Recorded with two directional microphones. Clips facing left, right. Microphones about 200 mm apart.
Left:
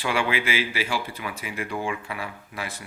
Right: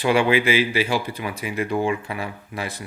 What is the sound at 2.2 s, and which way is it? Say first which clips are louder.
Speech: right 5 dB; 35° right (ahead or behind).